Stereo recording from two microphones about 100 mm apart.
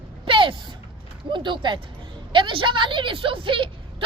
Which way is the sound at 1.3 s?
50° right (ahead or behind).